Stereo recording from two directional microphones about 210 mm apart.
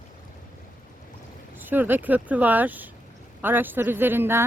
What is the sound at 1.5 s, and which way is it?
Speech, 10° right (ahead or behind).